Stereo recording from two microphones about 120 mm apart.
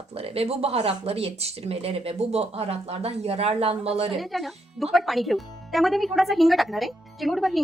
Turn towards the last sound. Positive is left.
turn(degrees=0)  # may be behind; listen again after turning